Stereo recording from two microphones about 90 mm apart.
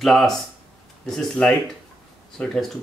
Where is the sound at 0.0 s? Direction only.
Centre (ahead or behind).